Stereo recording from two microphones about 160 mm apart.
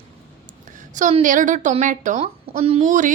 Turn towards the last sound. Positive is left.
turn(degrees=-50)  # may be behind; listen again after turning